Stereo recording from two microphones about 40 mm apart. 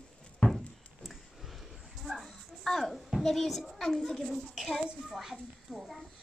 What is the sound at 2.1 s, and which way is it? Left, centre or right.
Dog, centre.